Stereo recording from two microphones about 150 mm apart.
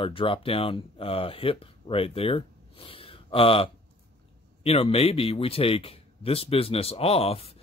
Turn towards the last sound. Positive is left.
turn(degrees=40)  # may be behind; listen again after turning